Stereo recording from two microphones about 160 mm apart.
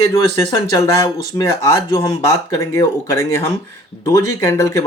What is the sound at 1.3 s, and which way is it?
Speech, 20° left (ahead or behind).